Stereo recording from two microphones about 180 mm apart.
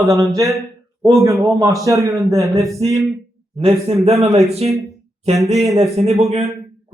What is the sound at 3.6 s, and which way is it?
Speech, 30° right (ahead or behind).